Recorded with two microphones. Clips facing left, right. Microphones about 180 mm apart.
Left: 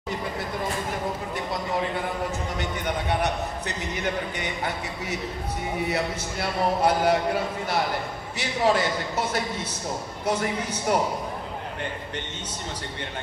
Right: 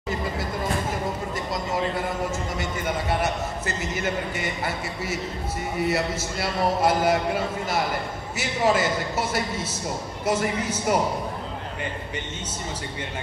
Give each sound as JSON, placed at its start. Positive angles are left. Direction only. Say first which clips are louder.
{"t": 1.3, "sound": "a man's voice", "louder": "even", "side_deg": 0}